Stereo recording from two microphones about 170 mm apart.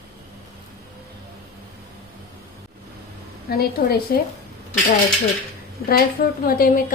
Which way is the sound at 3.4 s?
65° left (ahead or behind).